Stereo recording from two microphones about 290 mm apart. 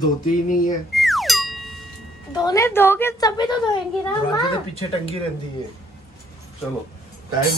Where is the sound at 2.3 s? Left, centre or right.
Centre.